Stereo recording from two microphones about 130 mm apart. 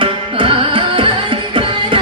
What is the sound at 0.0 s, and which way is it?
Music, 40° right (ahead or behind).